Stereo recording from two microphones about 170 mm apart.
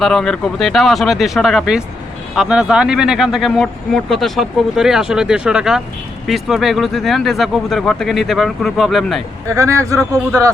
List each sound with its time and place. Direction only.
0.0 s speech: 5° left (ahead or behind)
9.5 s speech: 15° right (ahead or behind)